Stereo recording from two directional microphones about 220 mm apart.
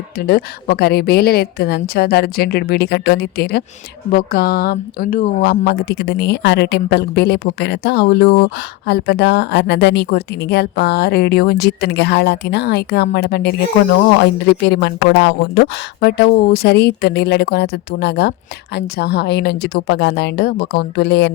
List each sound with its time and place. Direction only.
0.3 s speech: 45° left (ahead or behind)